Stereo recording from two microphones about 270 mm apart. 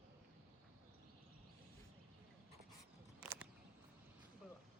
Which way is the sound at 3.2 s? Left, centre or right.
Centre.